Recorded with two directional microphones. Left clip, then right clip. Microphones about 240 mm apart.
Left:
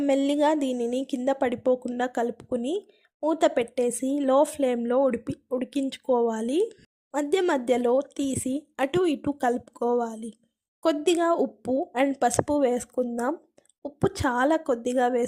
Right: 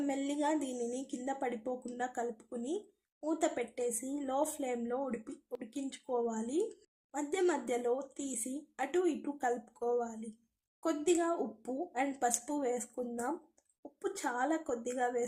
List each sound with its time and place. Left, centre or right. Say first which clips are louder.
0.0 s speech: left 12 dB; left